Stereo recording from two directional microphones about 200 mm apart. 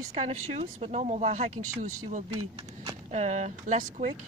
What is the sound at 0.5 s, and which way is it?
Speech, 30° right (ahead or behind).